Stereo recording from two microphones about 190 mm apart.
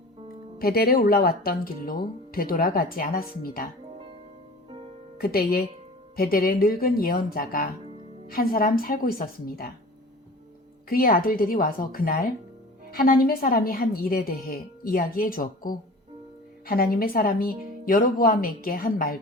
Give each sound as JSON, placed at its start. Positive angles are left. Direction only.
{"t": 0.6, "sound": "speech", "side_deg": 55}
{"t": 4.7, "sound": "music", "side_deg": -30}
{"t": 5.1, "sound": "speech", "side_deg": 55}
{"t": 10.8, "sound": "speech", "side_deg": 50}